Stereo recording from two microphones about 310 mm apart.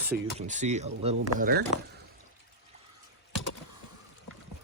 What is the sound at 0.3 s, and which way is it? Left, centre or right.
Speech, right.